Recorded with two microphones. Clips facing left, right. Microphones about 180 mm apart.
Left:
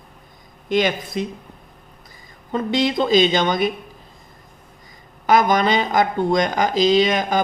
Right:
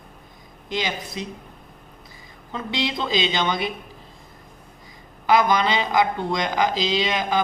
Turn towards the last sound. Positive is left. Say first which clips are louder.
# left 5 dB
turn(degrees=45)  # may be behind; listen again after turning